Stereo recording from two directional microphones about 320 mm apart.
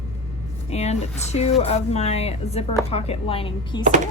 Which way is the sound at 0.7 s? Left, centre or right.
Centre.